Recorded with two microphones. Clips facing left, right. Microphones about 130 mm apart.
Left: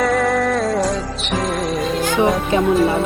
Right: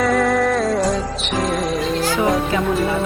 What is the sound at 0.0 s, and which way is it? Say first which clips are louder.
Music: even; centre (ahead or behind).